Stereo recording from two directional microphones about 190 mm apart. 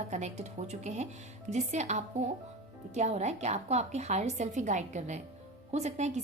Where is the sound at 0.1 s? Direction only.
35° right (ahead or behind).